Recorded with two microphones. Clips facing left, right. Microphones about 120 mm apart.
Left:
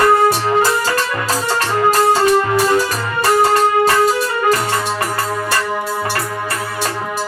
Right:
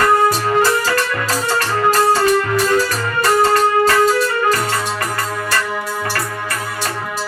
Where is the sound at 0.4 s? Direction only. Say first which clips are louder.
Even; 25° left (ahead or behind).